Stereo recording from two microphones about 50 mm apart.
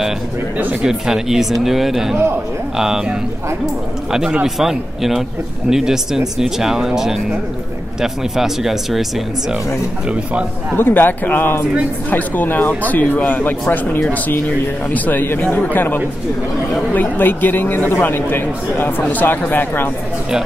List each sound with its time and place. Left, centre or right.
0.8 s speech: centre
4.6 s speech: centre
8.0 s speech: centre
10.8 s speech: left
16.9 s speech: left